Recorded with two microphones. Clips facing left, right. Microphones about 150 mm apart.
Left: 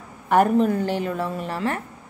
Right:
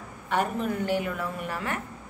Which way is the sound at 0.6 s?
35° left (ahead or behind).